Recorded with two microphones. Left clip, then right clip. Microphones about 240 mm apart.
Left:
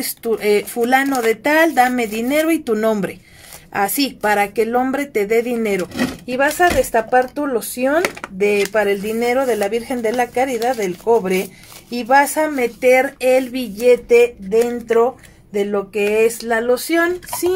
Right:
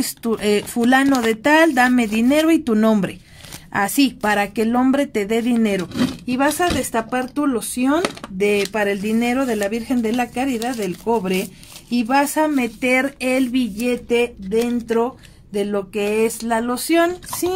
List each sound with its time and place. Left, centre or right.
0.2 s speech: right